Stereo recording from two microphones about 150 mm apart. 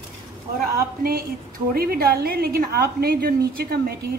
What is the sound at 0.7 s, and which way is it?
A woman's voice, 80° right.